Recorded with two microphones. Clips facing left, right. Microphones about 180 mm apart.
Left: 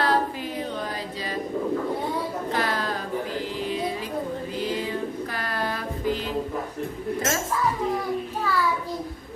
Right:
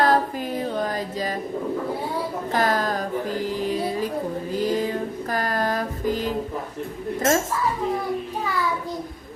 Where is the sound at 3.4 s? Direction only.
45° right (ahead or behind).